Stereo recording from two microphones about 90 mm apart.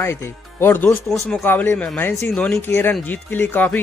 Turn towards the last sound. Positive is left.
turn(degrees=20)  # may be behind; listen again after turning